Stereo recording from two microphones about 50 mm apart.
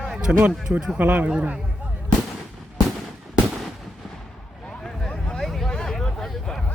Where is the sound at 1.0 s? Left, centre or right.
Right.